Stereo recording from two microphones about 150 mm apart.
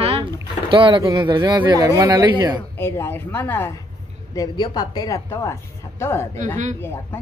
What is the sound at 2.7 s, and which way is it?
Speech, 15° left (ahead or behind).